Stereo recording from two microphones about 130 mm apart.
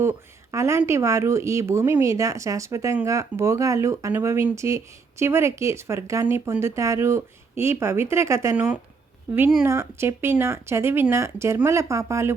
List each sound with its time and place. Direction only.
0.0 s speech: 20° right (ahead or behind)
9.6 s speech: 20° right (ahead or behind)